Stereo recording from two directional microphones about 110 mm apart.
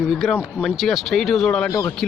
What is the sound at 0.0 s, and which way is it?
Speech, 5° right (ahead or behind).